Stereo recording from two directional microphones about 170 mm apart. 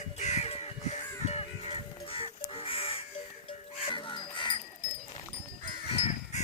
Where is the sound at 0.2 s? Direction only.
40° left (ahead or behind).